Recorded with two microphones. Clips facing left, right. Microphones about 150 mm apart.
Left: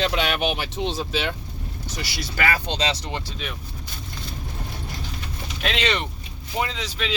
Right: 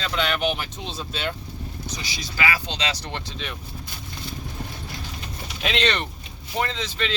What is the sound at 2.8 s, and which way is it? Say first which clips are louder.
Speech: left 3 dB; 25° left (ahead or behind).